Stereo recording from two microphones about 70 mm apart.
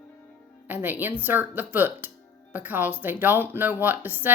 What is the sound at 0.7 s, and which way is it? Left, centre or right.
Speech, right.